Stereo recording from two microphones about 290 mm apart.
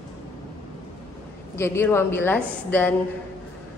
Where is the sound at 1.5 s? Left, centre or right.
Centre.